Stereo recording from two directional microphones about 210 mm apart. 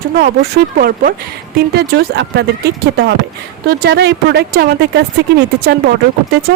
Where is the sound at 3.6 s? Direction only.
50° right (ahead or behind).